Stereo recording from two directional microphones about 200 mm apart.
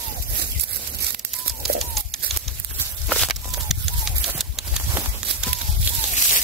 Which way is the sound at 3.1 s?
Centre (ahead or behind).